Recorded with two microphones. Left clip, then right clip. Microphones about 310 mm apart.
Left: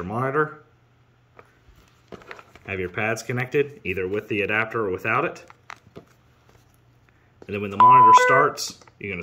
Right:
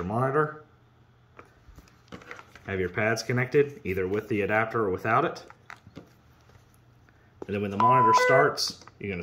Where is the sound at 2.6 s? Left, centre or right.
Centre.